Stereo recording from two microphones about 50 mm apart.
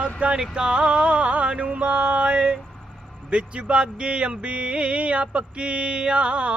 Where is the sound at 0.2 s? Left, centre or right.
Right.